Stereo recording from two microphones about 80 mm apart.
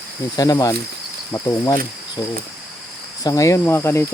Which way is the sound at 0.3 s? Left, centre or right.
Left.